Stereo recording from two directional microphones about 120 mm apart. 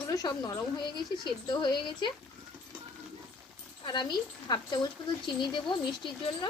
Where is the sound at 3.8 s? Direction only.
40° left (ahead or behind).